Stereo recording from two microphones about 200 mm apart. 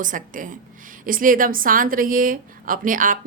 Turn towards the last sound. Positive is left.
turn(degrees=-40)  # may be behind; listen again after turning